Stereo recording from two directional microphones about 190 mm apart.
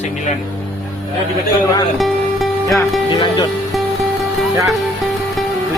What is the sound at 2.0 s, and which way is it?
Music, centre (ahead or behind).